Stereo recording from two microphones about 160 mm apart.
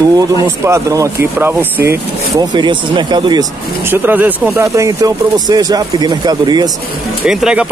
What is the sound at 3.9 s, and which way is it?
Speech, 10° right (ahead or behind).